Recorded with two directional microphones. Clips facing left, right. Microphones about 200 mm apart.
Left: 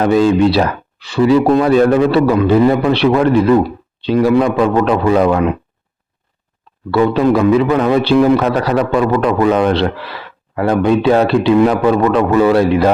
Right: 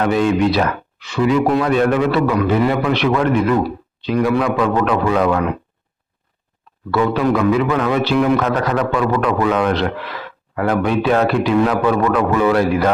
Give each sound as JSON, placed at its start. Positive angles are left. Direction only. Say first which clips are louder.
{"t": 0.0, "sound": "speech", "louder": "left 5 dB", "side_deg": 30}
{"t": 6.9, "sound": "a man's voice", "louder": "left 4 dB", "side_deg": 25}